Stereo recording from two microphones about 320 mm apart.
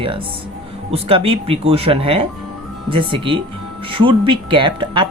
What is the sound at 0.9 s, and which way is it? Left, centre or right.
Speech, centre.